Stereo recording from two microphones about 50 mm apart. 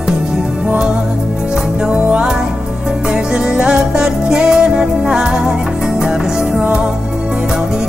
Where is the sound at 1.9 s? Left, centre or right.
Centre.